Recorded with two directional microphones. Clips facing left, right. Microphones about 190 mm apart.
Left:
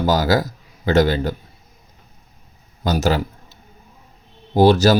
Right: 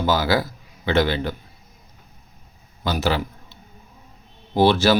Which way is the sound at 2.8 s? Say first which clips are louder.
Left 3 dB; 45° left (ahead or behind).